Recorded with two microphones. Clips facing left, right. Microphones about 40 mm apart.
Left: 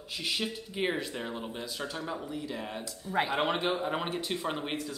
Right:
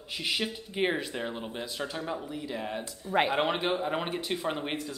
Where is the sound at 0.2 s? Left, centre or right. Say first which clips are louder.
Right 2 dB; centre.